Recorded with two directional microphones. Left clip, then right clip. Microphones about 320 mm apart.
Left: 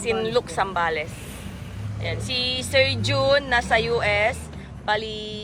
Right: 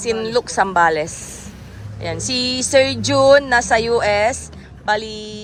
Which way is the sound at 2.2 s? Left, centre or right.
Centre.